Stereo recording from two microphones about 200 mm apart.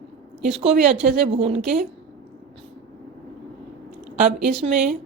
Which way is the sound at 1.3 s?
30° right (ahead or behind).